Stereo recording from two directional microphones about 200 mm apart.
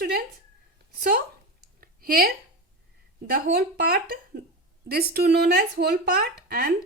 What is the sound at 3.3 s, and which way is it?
Speech, 45° right (ahead or behind).